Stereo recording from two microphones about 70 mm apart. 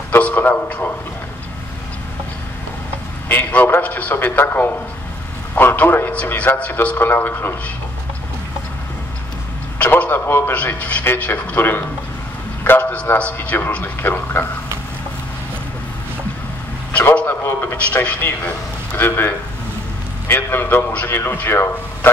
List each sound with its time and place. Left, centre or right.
0.2 s a man's voice: left
3.3 s a man's voice: left
9.8 s a man's voice: left
10.8 s a man's voice: left
17.1 s a man's voice: centre
17.4 s a man's voice: left
17.8 s speech: left
18.9 s a man's voice: left
20.6 s speech: left